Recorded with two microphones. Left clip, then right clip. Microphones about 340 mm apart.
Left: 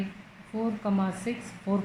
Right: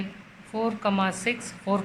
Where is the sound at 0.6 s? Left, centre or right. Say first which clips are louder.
Right 5 dB; right.